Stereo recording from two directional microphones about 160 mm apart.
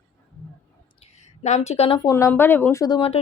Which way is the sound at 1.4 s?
45° left (ahead or behind).